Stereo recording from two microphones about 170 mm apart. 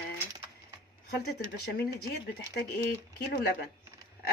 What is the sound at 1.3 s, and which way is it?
Speech, 65° left (ahead or behind).